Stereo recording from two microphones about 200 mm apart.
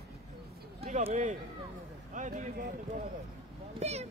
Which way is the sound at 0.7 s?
35° right (ahead or behind).